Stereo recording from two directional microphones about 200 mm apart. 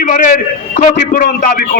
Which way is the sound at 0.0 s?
45° left (ahead or behind).